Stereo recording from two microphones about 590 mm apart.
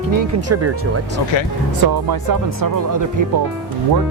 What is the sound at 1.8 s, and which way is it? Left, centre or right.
Speech, right.